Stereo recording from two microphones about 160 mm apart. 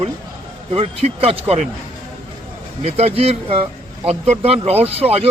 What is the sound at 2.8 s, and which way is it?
Speech, 40° right (ahead or behind).